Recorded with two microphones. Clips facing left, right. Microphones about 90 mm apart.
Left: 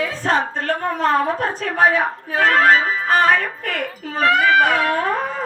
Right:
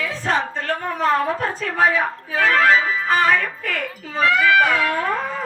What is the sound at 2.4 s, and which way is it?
Speech, 40° left (ahead or behind).